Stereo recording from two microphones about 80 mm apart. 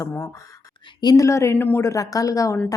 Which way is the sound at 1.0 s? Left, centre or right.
Left.